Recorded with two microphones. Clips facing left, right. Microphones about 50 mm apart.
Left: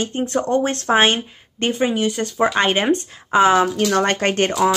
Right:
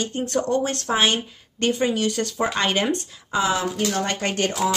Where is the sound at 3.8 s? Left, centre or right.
Left.